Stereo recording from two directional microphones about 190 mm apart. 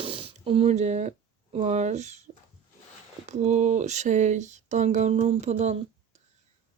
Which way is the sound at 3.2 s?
35° right (ahead or behind).